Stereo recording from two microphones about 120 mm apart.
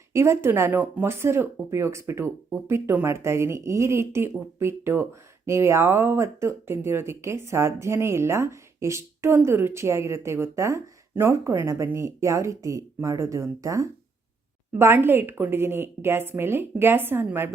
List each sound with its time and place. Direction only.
0.1 s speech: 20° right (ahead or behind)